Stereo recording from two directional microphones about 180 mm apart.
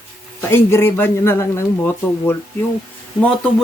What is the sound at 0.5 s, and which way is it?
Speech, 15° left (ahead or behind).